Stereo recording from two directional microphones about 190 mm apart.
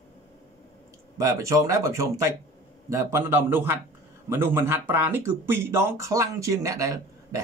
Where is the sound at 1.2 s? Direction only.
15° right (ahead or behind).